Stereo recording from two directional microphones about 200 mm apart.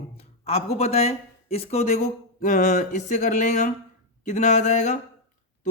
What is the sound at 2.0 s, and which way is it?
Speech, 45° left (ahead or behind).